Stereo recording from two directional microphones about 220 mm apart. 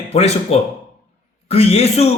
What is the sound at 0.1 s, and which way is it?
Speech, 30° left (ahead or behind).